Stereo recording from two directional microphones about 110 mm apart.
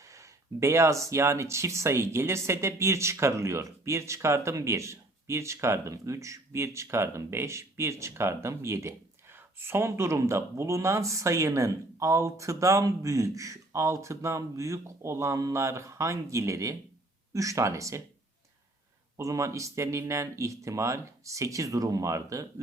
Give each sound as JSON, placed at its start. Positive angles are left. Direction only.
{"t": 0.0, "sound": "speech", "side_deg": -30}
{"t": 19.1, "sound": "speech", "side_deg": -30}